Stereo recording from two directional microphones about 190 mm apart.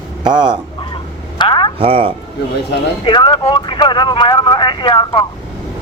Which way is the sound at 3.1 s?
25° left (ahead or behind).